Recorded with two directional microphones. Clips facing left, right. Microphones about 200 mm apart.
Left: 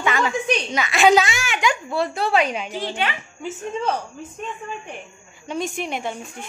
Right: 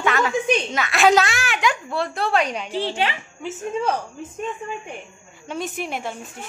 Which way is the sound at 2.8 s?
30° right (ahead or behind).